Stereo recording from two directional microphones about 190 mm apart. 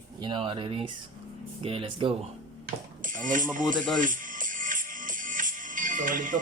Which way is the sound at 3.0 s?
45° right (ahead or behind).